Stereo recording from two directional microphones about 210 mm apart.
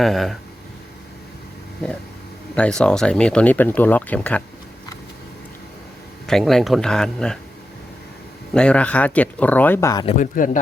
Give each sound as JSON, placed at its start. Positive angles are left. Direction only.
{"t": 0.0, "sound": "speech", "side_deg": 0}
{"t": 2.6, "sound": "speech", "side_deg": 5}
{"t": 6.2, "sound": "speech", "side_deg": 0}
{"t": 8.5, "sound": "speech", "side_deg": 5}
{"t": 10.1, "sound": "speech", "side_deg": 40}